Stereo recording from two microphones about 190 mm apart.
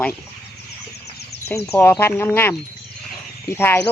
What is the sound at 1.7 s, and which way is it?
Speech, 10° left (ahead or behind).